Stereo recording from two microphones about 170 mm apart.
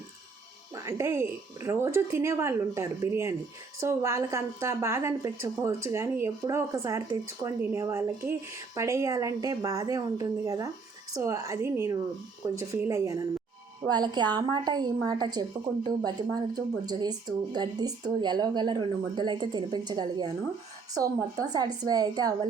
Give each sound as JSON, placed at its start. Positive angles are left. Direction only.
{"t": 0.7, "sound": "a woman's voice", "side_deg": -15}